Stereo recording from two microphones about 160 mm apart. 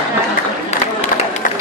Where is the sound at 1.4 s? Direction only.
60° left (ahead or behind).